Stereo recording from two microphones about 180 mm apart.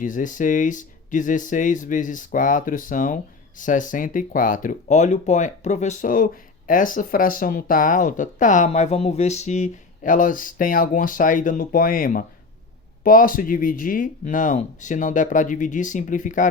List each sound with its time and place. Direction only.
0.0 s speech: 45° left (ahead or behind)